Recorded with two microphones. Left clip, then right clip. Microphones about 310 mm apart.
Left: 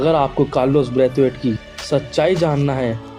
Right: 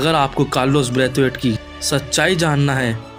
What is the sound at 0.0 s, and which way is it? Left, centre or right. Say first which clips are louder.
Speech: left 1 dB; right.